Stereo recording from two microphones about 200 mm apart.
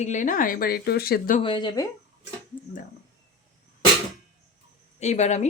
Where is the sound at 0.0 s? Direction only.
40° left (ahead or behind).